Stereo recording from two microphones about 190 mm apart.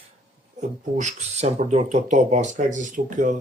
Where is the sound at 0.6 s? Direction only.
40° right (ahead or behind).